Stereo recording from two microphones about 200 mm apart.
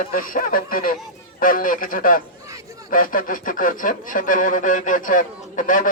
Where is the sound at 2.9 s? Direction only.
45° left (ahead or behind).